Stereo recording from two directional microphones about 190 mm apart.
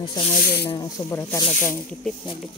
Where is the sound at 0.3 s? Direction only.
50° left (ahead or behind).